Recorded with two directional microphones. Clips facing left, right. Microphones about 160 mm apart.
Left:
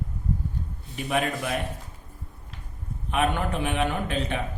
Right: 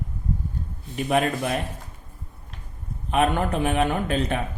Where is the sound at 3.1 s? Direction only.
40° right (ahead or behind).